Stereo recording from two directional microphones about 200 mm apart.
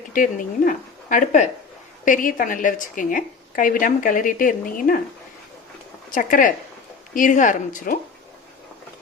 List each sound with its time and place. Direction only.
0.1 s a woman's voice: 40° left (ahead or behind)
6.1 s a woman's voice: 40° left (ahead or behind)